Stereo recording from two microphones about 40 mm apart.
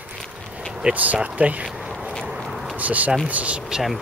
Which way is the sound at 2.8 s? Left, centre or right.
Right.